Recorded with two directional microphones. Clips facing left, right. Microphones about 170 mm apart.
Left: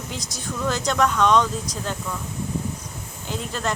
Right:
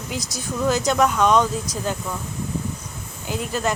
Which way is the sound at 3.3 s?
10° right (ahead or behind).